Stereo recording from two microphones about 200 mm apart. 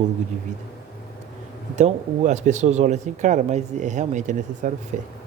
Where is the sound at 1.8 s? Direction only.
35° right (ahead or behind).